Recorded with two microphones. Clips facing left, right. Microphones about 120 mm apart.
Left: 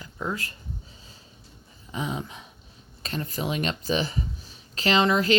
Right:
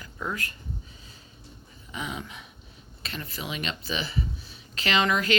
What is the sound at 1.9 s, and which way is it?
Speech, 30° left (ahead or behind).